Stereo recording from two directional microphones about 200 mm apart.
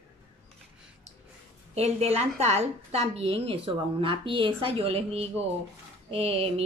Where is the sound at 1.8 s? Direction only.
30° right (ahead or behind).